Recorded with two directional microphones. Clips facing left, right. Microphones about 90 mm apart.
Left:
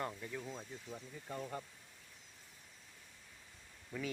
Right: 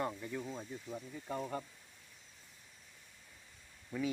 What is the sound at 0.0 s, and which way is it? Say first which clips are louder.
Speech: right 4 dB; 5° right (ahead or behind).